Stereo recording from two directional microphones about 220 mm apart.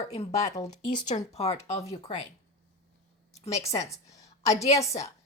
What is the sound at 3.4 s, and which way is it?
Speech, 30° left (ahead or behind).